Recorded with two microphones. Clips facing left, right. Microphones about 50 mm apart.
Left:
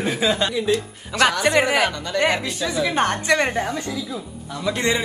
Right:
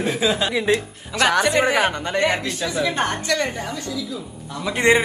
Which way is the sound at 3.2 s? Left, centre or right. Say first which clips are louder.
Left 3 dB; left.